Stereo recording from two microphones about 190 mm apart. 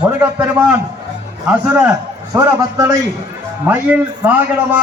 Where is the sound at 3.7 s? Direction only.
10° right (ahead or behind).